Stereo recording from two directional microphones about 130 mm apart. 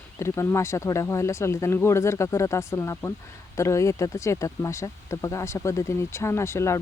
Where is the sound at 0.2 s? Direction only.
20° left (ahead or behind).